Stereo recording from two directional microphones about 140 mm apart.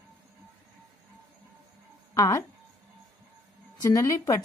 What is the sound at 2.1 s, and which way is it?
Speech, 25° left (ahead or behind).